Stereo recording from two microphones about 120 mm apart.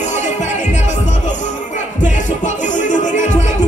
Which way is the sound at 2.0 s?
90° left.